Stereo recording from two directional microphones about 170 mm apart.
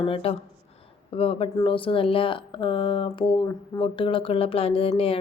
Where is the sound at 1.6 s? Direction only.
30° left (ahead or behind).